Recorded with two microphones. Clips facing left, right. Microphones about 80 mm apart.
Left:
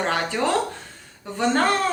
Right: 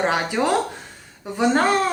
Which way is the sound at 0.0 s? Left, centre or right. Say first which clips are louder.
Right 2 dB; centre.